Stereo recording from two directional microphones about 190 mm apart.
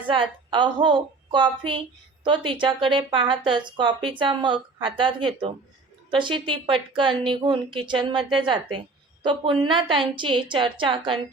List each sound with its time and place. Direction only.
0.1 s a woman's voice: 25° right (ahead or behind)